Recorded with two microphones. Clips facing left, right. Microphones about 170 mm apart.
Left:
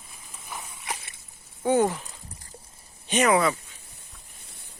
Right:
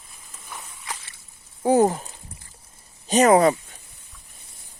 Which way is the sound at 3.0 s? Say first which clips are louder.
Right 6 dB; 40° right (ahead or behind).